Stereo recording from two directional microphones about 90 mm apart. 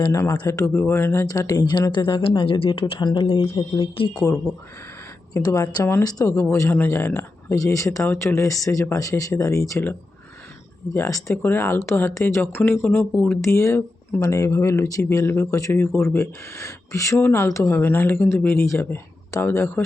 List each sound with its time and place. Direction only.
0.1 s speech: 35° left (ahead or behind)
0.7 s speech: 25° left (ahead or behind)
1.3 s speech: 45° left (ahead or behind); by 3.5 s 90° left
3.8 s speech: 70° left (ahead or behind)
5.3 s speech: 40° left (ahead or behind)
6.3 s speech: 30° left (ahead or behind)
7.5 s speech: 40° left (ahead or behind)
10.9 s speech: 35° left (ahead or behind)